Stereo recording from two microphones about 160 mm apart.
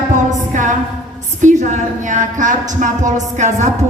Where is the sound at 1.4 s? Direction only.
50° right (ahead or behind).